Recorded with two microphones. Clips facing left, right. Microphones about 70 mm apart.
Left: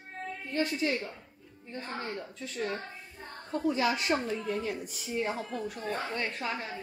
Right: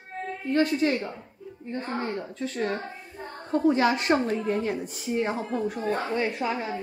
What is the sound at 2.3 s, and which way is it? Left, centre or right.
A woman's voice, right.